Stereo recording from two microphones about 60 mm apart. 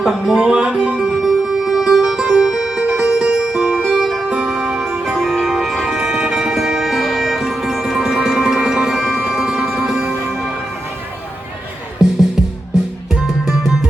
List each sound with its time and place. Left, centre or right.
0.3 s music: centre
1.0 s music: centre
3.9 s music: centre
12.0 s music: centre